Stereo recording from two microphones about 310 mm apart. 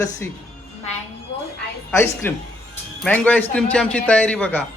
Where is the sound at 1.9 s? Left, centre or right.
Centre.